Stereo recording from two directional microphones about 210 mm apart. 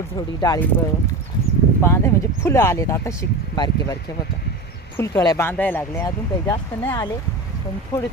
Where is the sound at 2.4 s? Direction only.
10° left (ahead or behind).